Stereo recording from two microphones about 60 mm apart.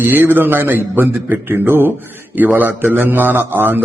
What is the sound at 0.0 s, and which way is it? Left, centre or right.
A man's voice, right.